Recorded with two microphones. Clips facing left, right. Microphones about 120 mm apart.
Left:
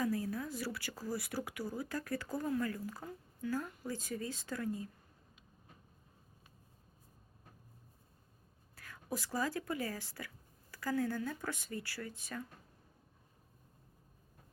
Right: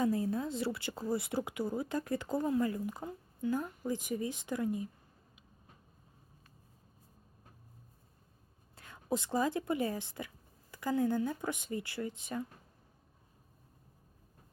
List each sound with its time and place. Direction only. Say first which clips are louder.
0.0 s speech: right 4 dB; 25° right (ahead or behind)
8.7 s a woman's voice: right 6 dB; 25° right (ahead or behind)